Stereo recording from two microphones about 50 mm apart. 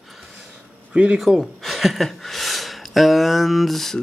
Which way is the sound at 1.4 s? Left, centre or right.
Centre.